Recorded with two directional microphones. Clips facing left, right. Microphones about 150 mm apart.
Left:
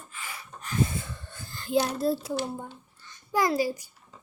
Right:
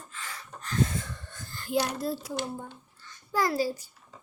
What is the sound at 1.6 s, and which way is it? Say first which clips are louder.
Speech: left 3 dB; 25° left (ahead or behind).